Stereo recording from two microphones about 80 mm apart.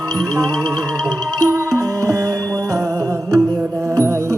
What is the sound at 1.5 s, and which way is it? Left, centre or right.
Music, right.